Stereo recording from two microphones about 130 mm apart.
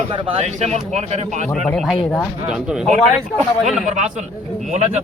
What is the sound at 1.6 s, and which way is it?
Speech, 5° left (ahead or behind).